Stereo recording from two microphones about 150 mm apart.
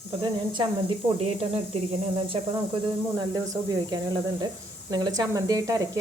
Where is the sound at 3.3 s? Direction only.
25° right (ahead or behind).